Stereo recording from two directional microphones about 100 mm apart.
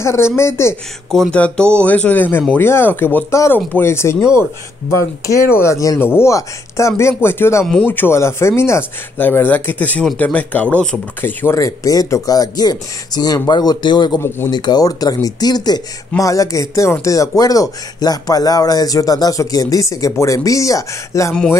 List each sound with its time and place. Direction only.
0.0 s speech: 25° left (ahead or behind)
1.1 s speech: 10° left (ahead or behind)
11.1 s speech: 20° left (ahead or behind)